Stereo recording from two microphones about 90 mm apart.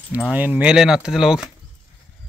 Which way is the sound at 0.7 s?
5° right (ahead or behind).